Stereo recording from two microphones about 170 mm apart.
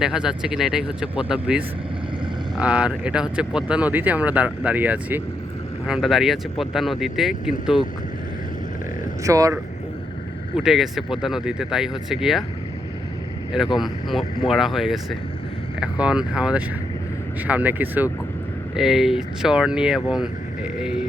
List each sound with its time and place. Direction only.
0.0 s speech: 5° right (ahead or behind)
9.2 s speech: 20° right (ahead or behind)
10.6 s speech: centre (ahead or behind)
13.7 s speech: centre (ahead or behind)